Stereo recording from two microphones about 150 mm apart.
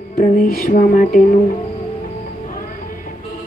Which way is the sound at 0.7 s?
60° left (ahead or behind).